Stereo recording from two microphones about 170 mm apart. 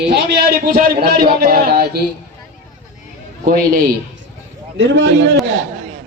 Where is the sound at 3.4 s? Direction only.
60° right (ahead or behind).